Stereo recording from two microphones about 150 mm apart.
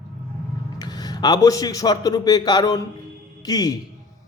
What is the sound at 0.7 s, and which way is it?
A man's voice, 25° left (ahead or behind).